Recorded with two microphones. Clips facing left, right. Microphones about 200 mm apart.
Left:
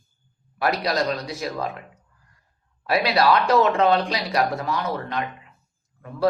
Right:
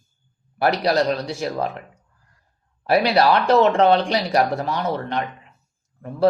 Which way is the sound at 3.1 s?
30° right (ahead or behind).